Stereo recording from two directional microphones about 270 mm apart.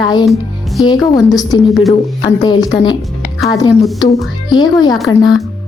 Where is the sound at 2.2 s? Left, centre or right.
Centre.